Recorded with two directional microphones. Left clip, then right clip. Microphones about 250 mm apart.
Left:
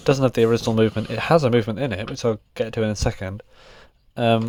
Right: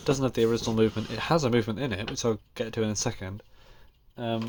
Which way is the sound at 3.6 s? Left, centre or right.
Left.